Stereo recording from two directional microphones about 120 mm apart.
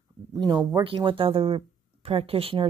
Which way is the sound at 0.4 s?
35° right (ahead or behind).